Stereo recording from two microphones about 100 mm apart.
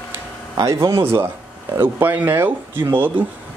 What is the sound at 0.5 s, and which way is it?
Speech, 35° right (ahead or behind).